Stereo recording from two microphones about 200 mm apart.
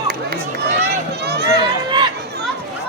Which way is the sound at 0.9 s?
55° right (ahead or behind).